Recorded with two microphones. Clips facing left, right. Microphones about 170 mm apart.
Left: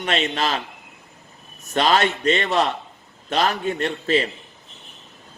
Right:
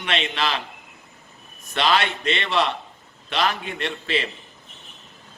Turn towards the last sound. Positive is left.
turn(degrees=40)  # may be behind; listen again after turning